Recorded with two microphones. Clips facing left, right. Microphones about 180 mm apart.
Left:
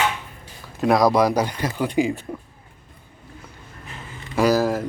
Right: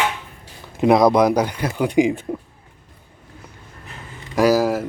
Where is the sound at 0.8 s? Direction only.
20° right (ahead or behind).